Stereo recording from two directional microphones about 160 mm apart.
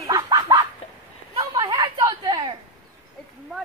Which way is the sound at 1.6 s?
20° right (ahead or behind).